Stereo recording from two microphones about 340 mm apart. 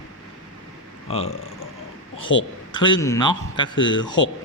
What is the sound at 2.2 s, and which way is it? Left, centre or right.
Speech, left.